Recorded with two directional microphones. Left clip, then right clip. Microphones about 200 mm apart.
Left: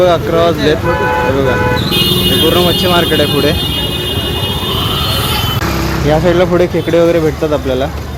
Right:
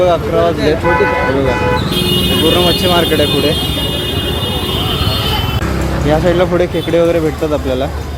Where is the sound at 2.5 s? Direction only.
5° left (ahead or behind).